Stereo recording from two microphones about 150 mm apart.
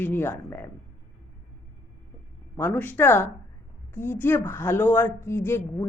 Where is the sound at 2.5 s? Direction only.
15° left (ahead or behind).